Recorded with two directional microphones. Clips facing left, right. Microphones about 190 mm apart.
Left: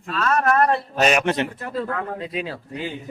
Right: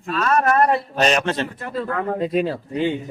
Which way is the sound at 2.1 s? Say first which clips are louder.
Right 8 dB; 50° right (ahead or behind).